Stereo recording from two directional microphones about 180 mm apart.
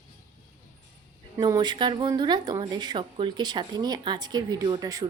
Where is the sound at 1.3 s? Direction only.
20° right (ahead or behind).